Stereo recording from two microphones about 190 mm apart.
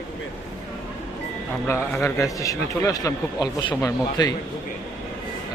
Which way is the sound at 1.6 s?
10° left (ahead or behind).